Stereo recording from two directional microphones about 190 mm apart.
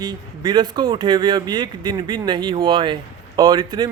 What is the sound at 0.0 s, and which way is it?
Speech, 25° right (ahead or behind).